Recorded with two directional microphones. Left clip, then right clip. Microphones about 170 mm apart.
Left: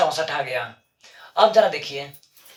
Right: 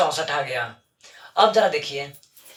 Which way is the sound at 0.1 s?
5° left (ahead or behind).